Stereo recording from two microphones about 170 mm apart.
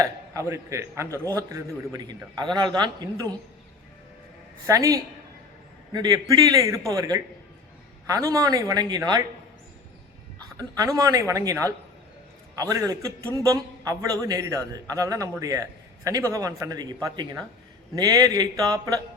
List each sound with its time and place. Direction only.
0.0 s a man's voice: 20° right (ahead or behind)
4.6 s a man's voice: 20° right (ahead or behind)
10.6 s a man's voice: 20° right (ahead or behind)
12.5 s a man's voice: 20° right (ahead or behind)